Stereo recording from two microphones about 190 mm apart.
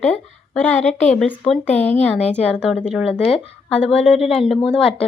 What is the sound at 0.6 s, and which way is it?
Speech, 10° left (ahead or behind).